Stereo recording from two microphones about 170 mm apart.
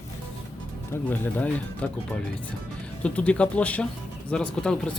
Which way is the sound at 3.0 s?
5° left (ahead or behind).